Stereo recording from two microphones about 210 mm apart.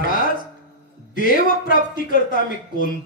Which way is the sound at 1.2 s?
40° left (ahead or behind).